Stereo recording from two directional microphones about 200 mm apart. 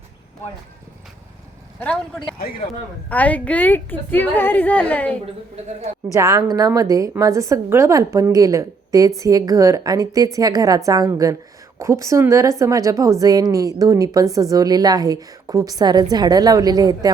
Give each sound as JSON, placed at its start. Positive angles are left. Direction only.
{"t": 1.8, "sound": "a woman's voice", "side_deg": 5}
{"t": 6.1, "sound": "a woman's voice", "side_deg": -15}